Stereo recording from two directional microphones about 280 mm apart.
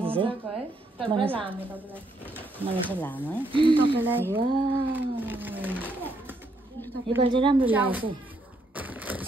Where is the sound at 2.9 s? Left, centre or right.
Centre.